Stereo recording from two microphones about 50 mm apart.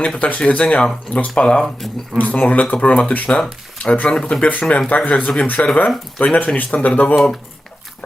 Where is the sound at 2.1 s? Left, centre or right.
Left.